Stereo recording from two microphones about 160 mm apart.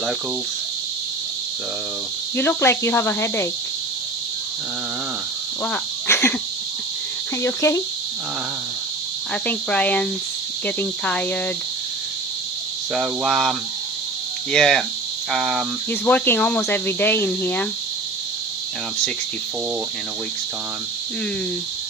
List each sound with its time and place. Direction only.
2.3 s speech: 15° left (ahead or behind)
5.6 s cricket: 10° left (ahead or behind)
7.4 s speech: 20° left (ahead or behind)
9.3 s speech: 5° left (ahead or behind)
12.9 s cricket: centre (ahead or behind)
15.9 s speech: 10° left (ahead or behind)